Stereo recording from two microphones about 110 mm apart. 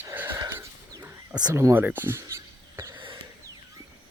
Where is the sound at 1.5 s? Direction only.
25° right (ahead or behind).